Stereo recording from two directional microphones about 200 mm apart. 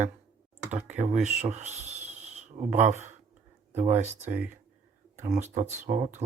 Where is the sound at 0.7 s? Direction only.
35° right (ahead or behind).